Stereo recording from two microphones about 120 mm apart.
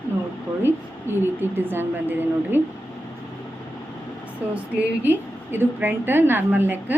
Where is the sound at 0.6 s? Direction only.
20° right (ahead or behind).